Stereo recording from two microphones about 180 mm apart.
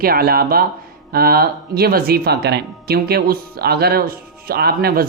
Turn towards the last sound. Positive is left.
turn(degrees=-55)  # may be behind; listen again after turning